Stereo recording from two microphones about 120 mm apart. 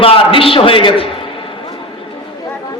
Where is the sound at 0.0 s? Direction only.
50° left (ahead or behind).